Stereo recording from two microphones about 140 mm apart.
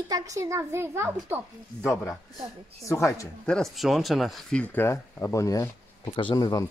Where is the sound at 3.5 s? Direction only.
5° left (ahead or behind).